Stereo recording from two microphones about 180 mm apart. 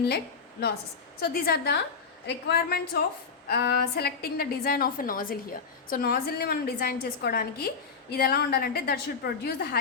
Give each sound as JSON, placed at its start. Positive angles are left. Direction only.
{"t": 1.2, "sound": "a woman's voice", "side_deg": 60}